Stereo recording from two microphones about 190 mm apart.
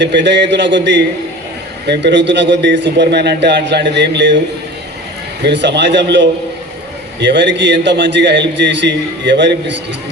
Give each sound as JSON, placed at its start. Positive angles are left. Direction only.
{"t": 0.0, "sound": "a man's voice", "side_deg": -65}
{"t": 5.4, "sound": "a man's voice", "side_deg": -65}